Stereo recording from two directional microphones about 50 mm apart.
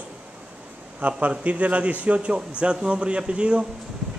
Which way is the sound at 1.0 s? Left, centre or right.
Right.